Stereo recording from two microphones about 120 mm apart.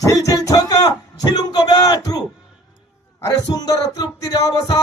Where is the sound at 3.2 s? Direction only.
30° left (ahead or behind).